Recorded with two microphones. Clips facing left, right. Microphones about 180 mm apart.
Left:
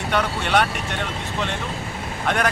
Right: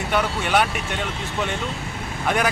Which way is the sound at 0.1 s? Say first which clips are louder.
Even; 5° right (ahead or behind).